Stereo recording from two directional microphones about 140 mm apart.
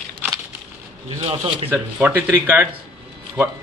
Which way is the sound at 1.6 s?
10° right (ahead or behind).